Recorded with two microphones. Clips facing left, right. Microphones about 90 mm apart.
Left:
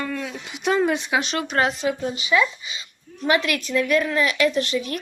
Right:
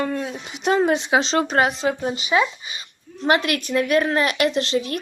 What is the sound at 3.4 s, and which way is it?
A woman's voice, 60° right (ahead or behind).